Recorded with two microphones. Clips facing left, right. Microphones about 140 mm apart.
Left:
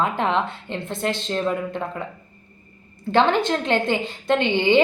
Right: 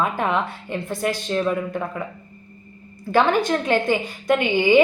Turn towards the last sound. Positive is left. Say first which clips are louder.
# right 1 dB
turn(degrees=25)  # may be behind; listen again after turning